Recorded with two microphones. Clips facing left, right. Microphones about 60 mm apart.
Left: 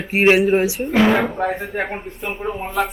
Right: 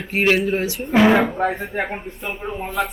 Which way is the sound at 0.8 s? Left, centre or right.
Centre.